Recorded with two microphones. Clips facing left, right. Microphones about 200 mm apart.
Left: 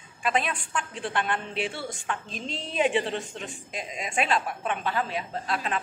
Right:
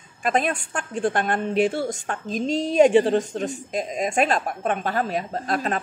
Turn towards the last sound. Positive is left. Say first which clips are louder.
# right 5 dB
turn(degrees=-45)  # may be behind; listen again after turning